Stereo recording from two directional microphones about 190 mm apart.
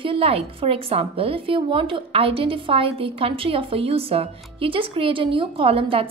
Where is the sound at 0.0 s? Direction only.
30° right (ahead or behind).